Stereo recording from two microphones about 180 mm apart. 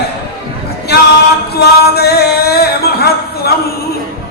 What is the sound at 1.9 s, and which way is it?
Speech, 60° left (ahead or behind).